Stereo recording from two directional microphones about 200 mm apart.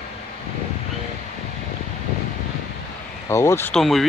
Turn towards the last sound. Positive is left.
turn(degrees=0)  # may be behind; listen again after turning